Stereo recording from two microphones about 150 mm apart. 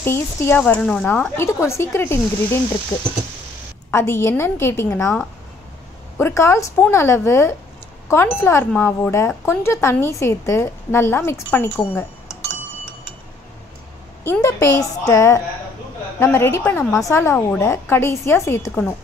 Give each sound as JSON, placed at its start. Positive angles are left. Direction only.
{"t": 0.0, "sound": "a woman's voice", "side_deg": 15}
{"t": 3.9, "sound": "a woman's voice", "side_deg": 15}
{"t": 6.1, "sound": "a woman's voice", "side_deg": 15}
{"t": 14.4, "sound": "a woman's voice", "side_deg": 20}